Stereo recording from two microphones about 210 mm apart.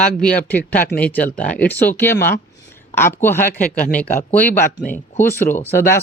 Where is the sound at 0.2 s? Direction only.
5° left (ahead or behind).